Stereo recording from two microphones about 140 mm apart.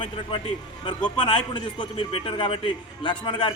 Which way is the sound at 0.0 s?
35° left (ahead or behind).